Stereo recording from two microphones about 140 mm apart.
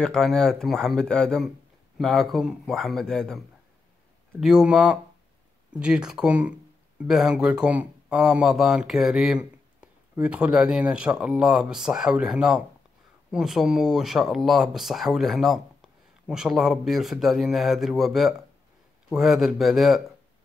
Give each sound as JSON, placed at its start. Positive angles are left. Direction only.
{"t": 0.0, "sound": "speech", "side_deg": 5}